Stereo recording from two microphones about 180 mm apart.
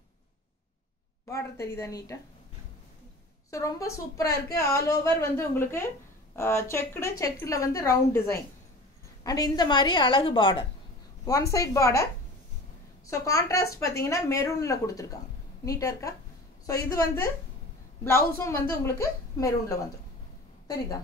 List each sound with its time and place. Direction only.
1.2 s a woman's voice: 15° left (ahead or behind)
3.4 s a woman's voice: 15° left (ahead or behind)
11.2 s a woman's voice: 20° left (ahead or behind)
13.1 s a woman's voice: 20° left (ahead or behind)